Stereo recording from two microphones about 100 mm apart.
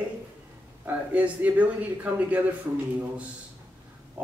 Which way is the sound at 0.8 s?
15° right (ahead or behind).